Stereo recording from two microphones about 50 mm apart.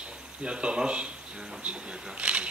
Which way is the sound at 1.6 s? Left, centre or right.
Right.